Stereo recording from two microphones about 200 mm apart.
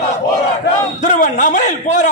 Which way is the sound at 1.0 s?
40° left (ahead or behind).